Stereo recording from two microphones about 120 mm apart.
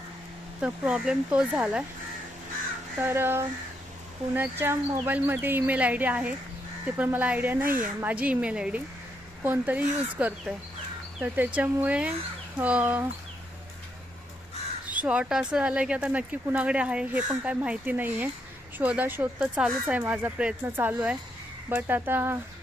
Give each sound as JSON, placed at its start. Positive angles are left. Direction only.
{"t": 0.6, "sound": "speech", "side_deg": -10}
{"t": 3.0, "sound": "speech", "side_deg": -20}
{"t": 14.8, "sound": "speech", "side_deg": -10}